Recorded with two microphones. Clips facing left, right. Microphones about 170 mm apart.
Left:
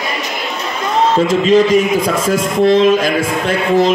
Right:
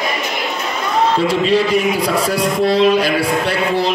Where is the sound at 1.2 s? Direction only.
40° left (ahead or behind).